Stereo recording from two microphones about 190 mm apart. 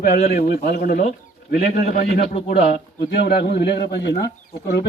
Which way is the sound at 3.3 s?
60° left (ahead or behind).